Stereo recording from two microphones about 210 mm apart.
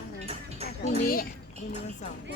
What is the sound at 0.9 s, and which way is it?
Speech, 45° left (ahead or behind).